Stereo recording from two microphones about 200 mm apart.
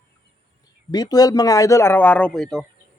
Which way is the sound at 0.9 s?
20° left (ahead or behind).